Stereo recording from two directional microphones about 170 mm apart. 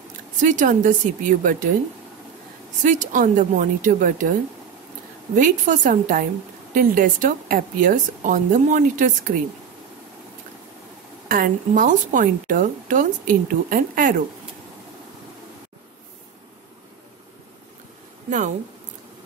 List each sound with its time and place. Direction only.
0.4 s a woman's voice: 50° right (ahead or behind)
2.8 s a woman's voice: 50° right (ahead or behind)
5.3 s a woman's voice: 50° right (ahead or behind)
11.2 s a woman's voice: 55° right (ahead or behind)